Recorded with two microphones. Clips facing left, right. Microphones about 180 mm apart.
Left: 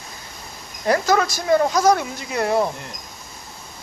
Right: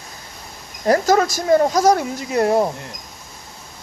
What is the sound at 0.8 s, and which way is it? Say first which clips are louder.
Speech: right 3 dB; 40° right (ahead or behind).